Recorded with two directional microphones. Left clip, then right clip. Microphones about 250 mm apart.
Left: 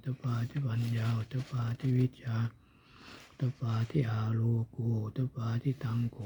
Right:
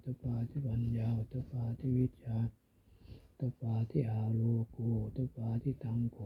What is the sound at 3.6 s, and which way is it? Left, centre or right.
Speech, centre.